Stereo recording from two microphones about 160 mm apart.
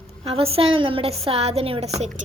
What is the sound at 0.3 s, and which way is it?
A woman's voice, 35° right (ahead or behind).